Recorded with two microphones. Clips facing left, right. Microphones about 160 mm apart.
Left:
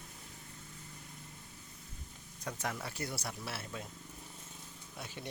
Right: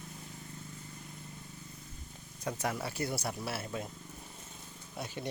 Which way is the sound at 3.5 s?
45° right (ahead or behind).